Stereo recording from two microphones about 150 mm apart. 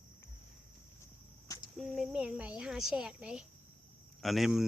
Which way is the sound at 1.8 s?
Centre (ahead or behind).